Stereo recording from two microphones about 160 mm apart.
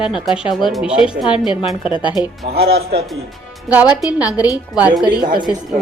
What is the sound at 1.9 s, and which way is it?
Speech, 30° left (ahead or behind).